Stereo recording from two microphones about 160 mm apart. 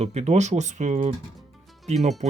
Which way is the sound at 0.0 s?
40° right (ahead or behind).